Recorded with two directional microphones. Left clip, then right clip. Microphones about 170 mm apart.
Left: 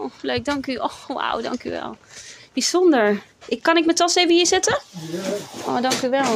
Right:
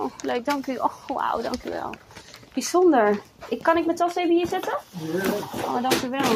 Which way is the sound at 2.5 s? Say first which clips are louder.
Left 2 dB; 50° left (ahead or behind).